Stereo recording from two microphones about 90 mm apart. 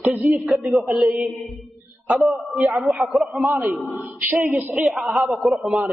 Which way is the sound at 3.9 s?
25° right (ahead or behind).